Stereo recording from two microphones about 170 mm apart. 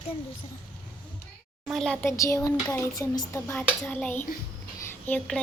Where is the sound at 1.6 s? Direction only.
Centre (ahead or behind).